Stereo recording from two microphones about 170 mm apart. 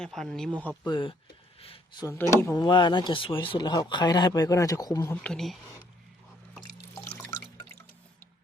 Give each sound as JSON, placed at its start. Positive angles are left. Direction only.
{"t": 0.0, "sound": "speech", "side_deg": 5}
{"t": 0.9, "sound": "speech", "side_deg": 25}
{"t": 1.5, "sound": "a sound", "side_deg": 35}
{"t": 2.1, "sound": "speech", "side_deg": 15}
{"t": 6.9, "sound": "drip", "side_deg": 15}